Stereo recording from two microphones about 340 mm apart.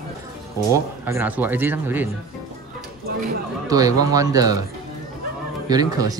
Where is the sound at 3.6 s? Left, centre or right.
Centre.